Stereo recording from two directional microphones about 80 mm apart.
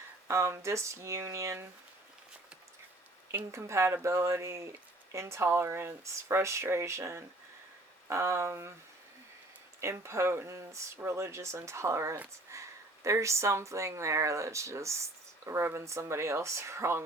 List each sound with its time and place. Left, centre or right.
0.3 s speech: right
3.5 s speech: right
9.8 s speech: right